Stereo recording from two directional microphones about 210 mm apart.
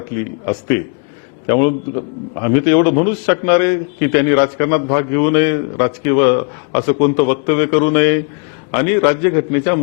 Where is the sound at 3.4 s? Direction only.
15° left (ahead or behind).